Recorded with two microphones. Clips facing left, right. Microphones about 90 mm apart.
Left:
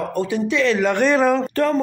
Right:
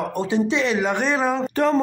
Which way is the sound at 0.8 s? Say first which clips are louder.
Left 4 dB; 5° right (ahead or behind).